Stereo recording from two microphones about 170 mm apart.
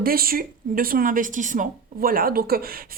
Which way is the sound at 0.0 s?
60° right (ahead or behind).